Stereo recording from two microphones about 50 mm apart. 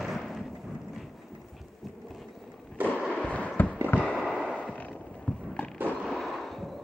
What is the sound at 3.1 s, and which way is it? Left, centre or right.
Fireworks, left.